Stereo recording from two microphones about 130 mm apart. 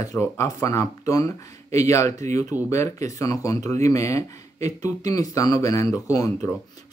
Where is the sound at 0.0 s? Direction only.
25° left (ahead or behind).